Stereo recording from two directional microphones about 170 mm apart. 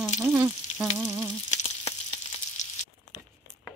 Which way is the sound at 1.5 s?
40° left (ahead or behind).